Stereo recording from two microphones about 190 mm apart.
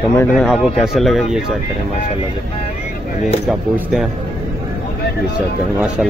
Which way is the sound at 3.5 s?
Centre (ahead or behind).